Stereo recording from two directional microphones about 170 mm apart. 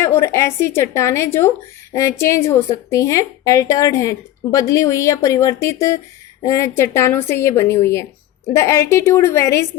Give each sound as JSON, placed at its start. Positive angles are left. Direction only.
{"t": 0.0, "sound": "a woman's voice", "side_deg": 15}